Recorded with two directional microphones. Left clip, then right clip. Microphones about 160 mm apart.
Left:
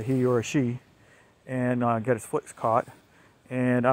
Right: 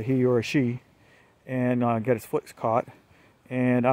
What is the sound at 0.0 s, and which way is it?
Speech, 20° right (ahead or behind).